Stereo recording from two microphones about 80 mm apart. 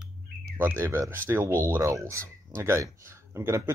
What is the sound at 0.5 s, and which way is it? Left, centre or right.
Speech, right.